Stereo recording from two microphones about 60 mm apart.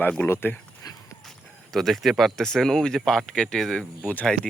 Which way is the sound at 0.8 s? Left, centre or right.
Left.